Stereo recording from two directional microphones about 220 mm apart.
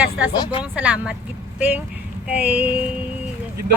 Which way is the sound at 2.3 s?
5° right (ahead or behind).